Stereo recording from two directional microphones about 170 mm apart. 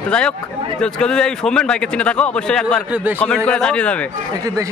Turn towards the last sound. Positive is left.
turn(degrees=5)  # may be behind; listen again after turning